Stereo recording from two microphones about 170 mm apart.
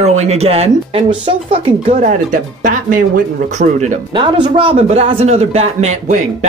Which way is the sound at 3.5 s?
45° right (ahead or behind).